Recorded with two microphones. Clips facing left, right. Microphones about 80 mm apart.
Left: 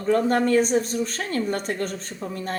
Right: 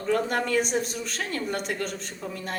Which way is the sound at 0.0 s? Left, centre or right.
Left.